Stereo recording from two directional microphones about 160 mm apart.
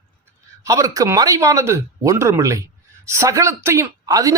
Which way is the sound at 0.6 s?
20° right (ahead or behind).